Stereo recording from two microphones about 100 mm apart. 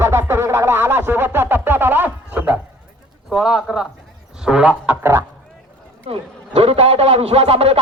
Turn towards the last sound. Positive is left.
turn(degrees=-90)